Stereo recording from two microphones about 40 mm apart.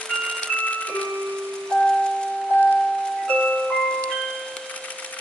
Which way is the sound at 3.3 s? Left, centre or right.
Left.